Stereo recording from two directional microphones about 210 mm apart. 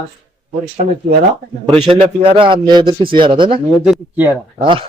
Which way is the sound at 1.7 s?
25° right (ahead or behind).